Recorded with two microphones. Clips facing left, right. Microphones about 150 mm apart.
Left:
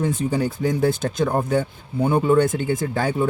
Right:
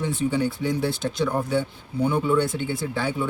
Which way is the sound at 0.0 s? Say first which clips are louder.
Left 2 dB; 45° left (ahead or behind).